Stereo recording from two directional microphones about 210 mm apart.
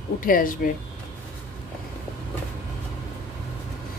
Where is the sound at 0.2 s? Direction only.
40° left (ahead or behind).